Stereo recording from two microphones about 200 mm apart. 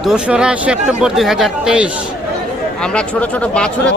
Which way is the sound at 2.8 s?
5° left (ahead or behind).